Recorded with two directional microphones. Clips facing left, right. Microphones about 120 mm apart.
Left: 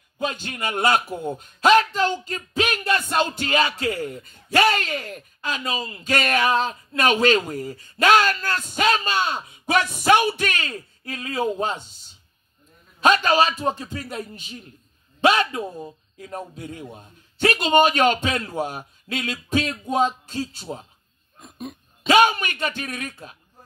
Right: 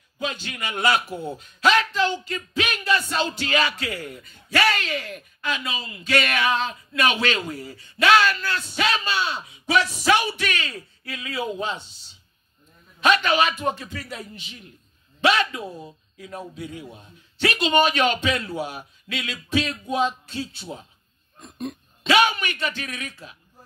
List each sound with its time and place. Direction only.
0.2 s speech: 45° left (ahead or behind)
21.4 s speech: 5° left (ahead or behind)
22.0 s speech: 45° left (ahead or behind)